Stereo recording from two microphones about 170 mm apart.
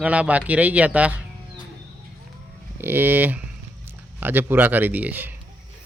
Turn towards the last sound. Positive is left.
turn(degrees=-10)  # may be behind; listen again after turning